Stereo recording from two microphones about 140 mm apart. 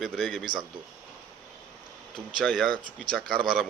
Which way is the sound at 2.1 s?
5° left (ahead or behind).